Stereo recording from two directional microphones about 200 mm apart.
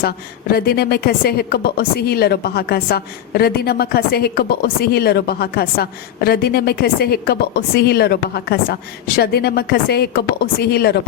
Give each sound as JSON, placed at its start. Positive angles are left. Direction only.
{"t": 0.5, "sound": "a woman's voice", "side_deg": 50}